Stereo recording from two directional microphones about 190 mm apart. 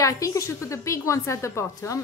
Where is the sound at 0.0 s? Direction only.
15° left (ahead or behind).